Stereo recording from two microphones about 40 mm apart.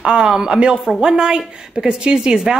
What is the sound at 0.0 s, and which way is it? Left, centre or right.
A woman's voice, right.